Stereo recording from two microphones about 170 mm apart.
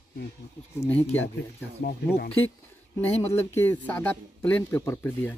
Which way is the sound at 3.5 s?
10° left (ahead or behind).